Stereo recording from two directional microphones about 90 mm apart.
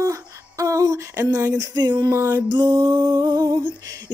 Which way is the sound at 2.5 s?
55° right (ahead or behind).